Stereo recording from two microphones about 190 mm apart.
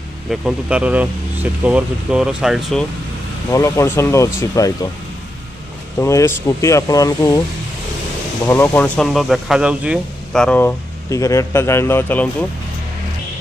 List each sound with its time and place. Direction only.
0.3 s speech: 5° right (ahead or behind)
3.5 s speech: 15° left (ahead or behind)
5.9 s speech: 15° left (ahead or behind)
8.5 s speech: 10° left (ahead or behind)